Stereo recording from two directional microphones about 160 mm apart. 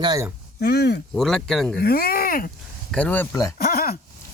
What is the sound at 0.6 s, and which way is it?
Speech, 90° left.